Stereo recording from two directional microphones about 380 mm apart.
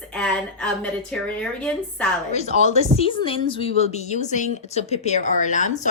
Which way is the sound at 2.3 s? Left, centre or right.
Centre.